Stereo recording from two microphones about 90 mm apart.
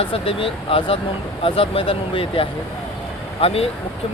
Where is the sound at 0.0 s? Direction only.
90° left.